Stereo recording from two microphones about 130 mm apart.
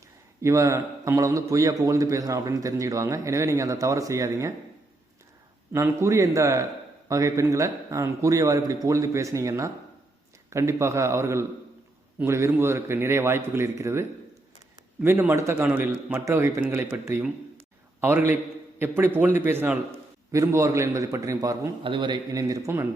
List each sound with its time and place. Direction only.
0.4 s a man's voice: 20° right (ahead or behind)
5.7 s a man's voice: 20° right (ahead or behind)
15.0 s a man's voice: 20° right (ahead or behind)
21.8 s a man's voice: 35° right (ahead or behind); by 22.9 s 20° right (ahead or behind)